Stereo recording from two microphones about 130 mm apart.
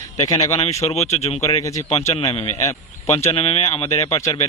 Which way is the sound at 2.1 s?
50° left (ahead or behind).